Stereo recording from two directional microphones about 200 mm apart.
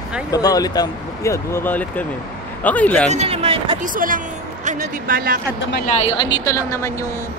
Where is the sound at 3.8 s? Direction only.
45° right (ahead or behind).